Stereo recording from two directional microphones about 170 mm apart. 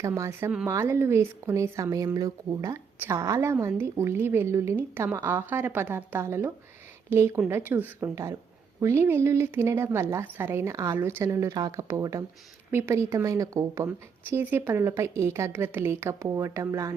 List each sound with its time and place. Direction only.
0.0 s a woman's voice: 15° right (ahead or behind)